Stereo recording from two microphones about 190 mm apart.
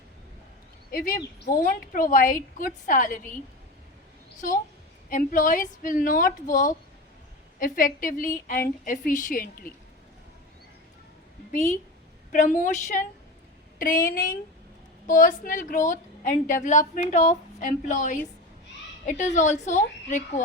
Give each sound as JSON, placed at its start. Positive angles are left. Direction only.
{"t": 0.9, "sound": "a woman's voice", "side_deg": 50}
{"t": 5.0, "sound": "a woman's voice", "side_deg": 45}
{"t": 12.3, "sound": "a woman's voice", "side_deg": 40}